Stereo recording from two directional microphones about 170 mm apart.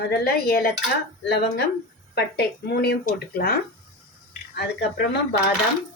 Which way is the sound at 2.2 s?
70° left (ahead or behind).